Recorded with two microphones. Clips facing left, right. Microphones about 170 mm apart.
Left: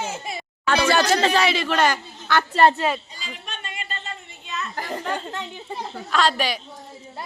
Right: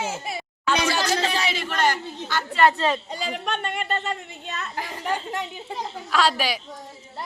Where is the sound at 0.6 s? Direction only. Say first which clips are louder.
Left 4 dB; 60° left (ahead or behind); by 2.4 s 80° left.